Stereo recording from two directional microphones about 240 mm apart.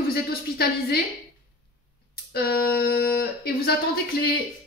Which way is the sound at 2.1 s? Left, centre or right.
Left.